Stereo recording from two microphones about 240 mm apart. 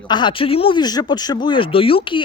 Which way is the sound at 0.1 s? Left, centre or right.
Centre.